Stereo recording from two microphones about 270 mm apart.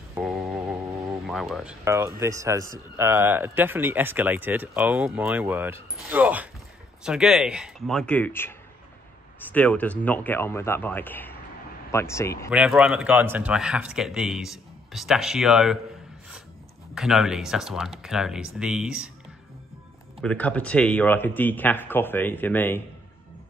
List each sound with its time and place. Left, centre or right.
0.1 s a sound: centre
1.2 s a man's voice: centre
12.4 s a man's voice: centre
16.9 s a man's voice: centre
20.2 s a man's voice: centre